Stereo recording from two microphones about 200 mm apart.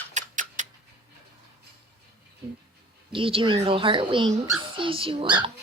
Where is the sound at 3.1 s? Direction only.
25° right (ahead or behind).